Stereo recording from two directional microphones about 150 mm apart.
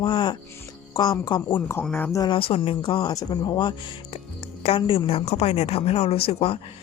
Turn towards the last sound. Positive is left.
turn(degrees=40)  # may be behind; listen again after turning